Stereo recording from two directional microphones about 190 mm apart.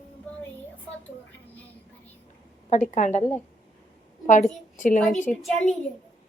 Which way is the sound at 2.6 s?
40° left (ahead or behind).